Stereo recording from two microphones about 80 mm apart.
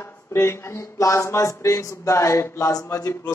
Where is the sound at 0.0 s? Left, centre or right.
Left.